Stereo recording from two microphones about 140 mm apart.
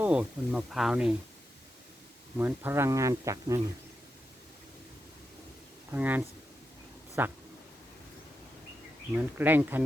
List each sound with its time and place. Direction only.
0.0 s speech: 5° right (ahead or behind)
2.4 s speech: 15° right (ahead or behind)
5.9 s speech: 15° right (ahead or behind)
9.1 s speech: 15° right (ahead or behind)